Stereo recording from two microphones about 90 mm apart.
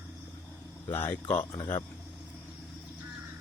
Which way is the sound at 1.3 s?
55° left (ahead or behind).